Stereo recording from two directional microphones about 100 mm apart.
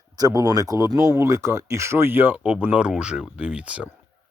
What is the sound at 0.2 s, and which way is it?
Speech, 35° right (ahead or behind).